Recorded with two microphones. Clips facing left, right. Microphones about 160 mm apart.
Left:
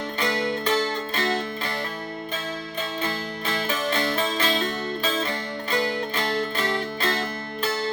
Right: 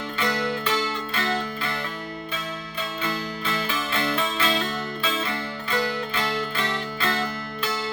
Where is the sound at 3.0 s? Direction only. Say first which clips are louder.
Right 3 dB; 35° left (ahead or behind).